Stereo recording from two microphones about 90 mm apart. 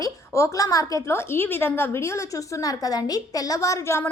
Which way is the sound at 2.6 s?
45° left (ahead or behind).